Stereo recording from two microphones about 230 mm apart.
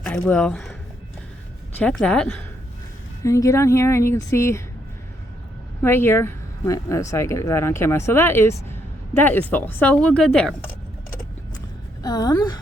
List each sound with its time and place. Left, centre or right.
0.0 s speech: centre
1.8 s speech: centre
5.8 s speech: centre
12.0 s speech: centre